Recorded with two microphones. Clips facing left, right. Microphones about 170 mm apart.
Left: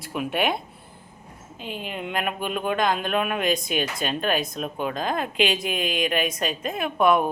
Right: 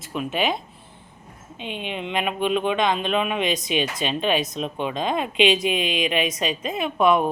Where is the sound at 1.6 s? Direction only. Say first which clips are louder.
Right 2 dB; 5° left (ahead or behind).